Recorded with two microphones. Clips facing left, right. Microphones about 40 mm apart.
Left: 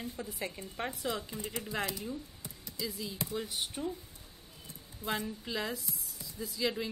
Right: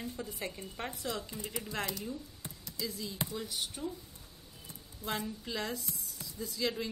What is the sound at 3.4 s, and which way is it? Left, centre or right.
Speech, left.